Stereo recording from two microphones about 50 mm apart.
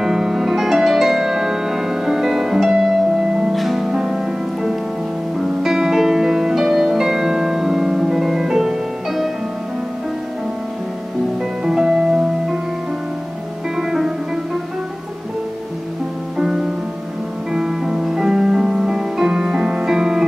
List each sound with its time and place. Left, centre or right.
0.0 s music: centre
11.6 s music: centre
13.7 s music: centre
16.3 s music: centre